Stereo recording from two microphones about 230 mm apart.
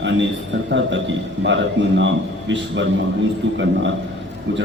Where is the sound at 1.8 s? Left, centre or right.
Right.